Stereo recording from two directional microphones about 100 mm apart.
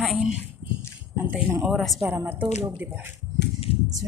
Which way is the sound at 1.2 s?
15° right (ahead or behind).